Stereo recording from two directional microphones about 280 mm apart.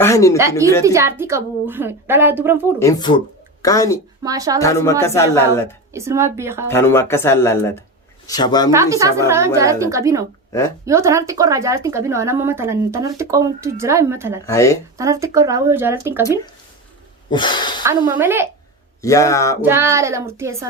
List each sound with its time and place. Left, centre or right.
0.0 s a sound: centre
0.9 s speech: centre
2.7 s speech: centre
4.2 s speech: centre
4.6 s speech: centre
5.9 s speech: centre
6.7 s speech: centre
8.7 s speech: centre
14.4 s speech: centre
14.9 s speech: centre
17.3 s speech: centre
17.8 s speech: centre
19.0 s speech: centre
19.6 s speech: centre